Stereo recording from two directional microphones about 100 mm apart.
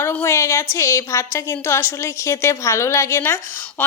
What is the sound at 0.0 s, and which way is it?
A woman's voice, 20° left (ahead or behind).